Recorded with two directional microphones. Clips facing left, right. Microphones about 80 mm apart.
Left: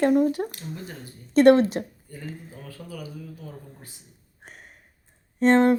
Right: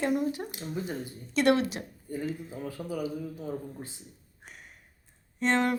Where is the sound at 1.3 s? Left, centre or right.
Left.